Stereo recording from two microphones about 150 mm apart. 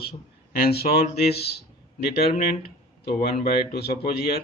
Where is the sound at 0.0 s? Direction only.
90° left.